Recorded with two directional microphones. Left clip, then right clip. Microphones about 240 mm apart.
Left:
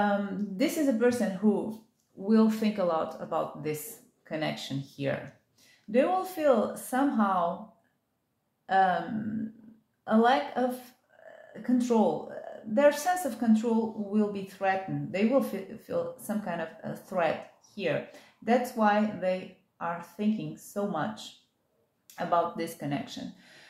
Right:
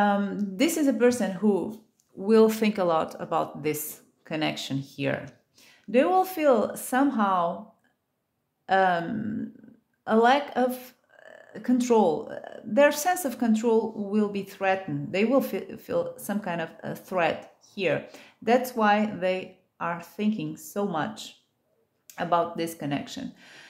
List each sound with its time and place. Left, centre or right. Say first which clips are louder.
0.0 s a woman's voice: right 4 dB; right
8.6 s speech: right 2 dB; right
10.0 s a woman's voice: right 3 dB; right